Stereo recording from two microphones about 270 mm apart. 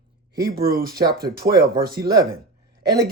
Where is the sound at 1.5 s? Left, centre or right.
Centre.